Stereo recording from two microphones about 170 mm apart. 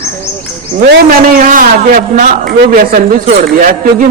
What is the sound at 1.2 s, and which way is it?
A man's voice, 55° right (ahead or behind).